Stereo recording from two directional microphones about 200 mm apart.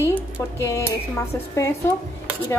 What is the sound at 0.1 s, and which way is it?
Speech, 15° left (ahead or behind).